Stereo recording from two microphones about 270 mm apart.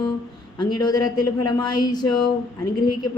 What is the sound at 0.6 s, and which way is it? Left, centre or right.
A man's voice, centre.